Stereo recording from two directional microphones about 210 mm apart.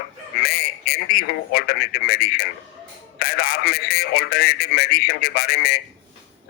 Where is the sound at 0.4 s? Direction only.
45° left (ahead or behind).